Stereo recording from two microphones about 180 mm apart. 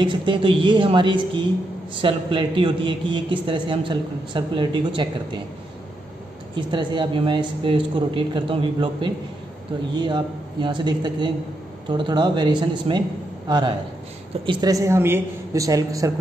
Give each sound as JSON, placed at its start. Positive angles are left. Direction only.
{"t": 0.0, "sound": "a man's voice", "side_deg": -25}
{"t": 6.7, "sound": "a man's voice", "side_deg": -25}